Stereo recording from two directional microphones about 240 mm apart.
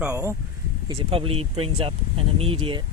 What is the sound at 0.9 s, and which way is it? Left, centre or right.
Speech, right.